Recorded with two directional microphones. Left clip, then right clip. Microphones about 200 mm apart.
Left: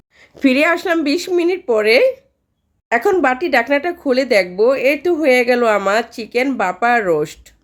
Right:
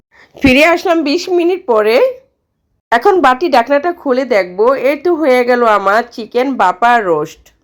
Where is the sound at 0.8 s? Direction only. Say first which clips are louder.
Right 4 dB; centre (ahead or behind).